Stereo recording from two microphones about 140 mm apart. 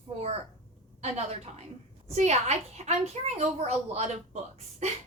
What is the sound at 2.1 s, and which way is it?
A woman's voice, 50° right (ahead or behind).